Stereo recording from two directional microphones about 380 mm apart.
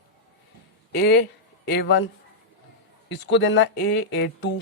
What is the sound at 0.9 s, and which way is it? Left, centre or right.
Speech, left.